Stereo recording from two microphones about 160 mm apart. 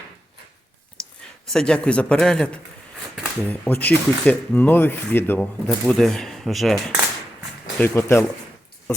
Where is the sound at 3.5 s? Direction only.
10° left (ahead or behind).